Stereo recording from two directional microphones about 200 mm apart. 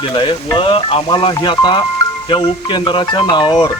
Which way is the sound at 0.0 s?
25° left (ahead or behind).